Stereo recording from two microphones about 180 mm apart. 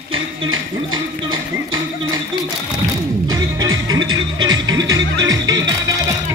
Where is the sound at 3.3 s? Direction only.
20° right (ahead or behind).